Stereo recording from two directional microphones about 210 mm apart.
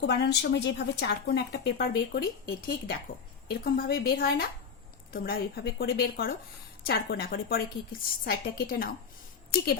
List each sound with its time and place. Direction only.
0.0 s a woman's voice: 55° left (ahead or behind)